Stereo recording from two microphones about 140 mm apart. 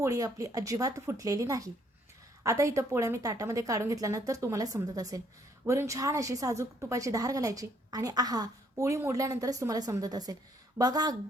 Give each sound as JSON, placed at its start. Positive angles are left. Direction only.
{"t": 0.0, "sound": "a woman's voice", "side_deg": -25}